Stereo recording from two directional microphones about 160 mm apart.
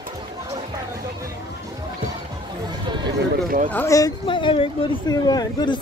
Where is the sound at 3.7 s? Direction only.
15° left (ahead or behind).